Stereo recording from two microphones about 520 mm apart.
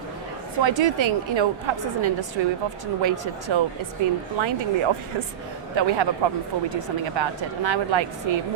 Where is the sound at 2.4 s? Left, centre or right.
Right.